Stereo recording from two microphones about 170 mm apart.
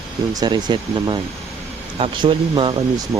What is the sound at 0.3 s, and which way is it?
Speech, 25° right (ahead or behind).